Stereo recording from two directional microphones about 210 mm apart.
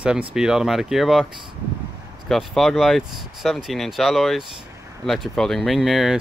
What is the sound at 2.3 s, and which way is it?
Speech, centre (ahead or behind).